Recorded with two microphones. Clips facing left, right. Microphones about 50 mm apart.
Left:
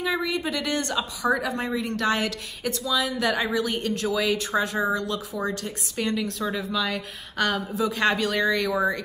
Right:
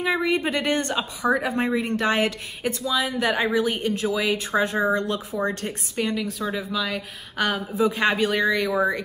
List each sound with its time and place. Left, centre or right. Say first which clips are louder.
0.0 s speech: right 3 dB; right
5.9 s a woman's voice: right 1 dB; centre
7.6 s speech: right 2 dB; right